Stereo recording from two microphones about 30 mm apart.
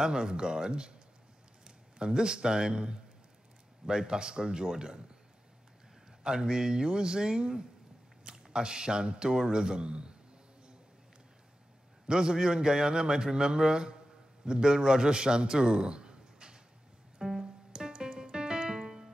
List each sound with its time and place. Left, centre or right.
0.0 s a man's voice: right
2.0 s a man's voice: right
6.2 s a man's voice: right
12.1 s a man's voice: right
17.2 s music: centre
17.7 s music: right
18.9 s music: centre